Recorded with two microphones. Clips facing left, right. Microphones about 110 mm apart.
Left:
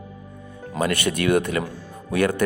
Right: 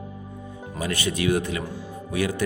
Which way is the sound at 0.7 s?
60° left (ahead or behind).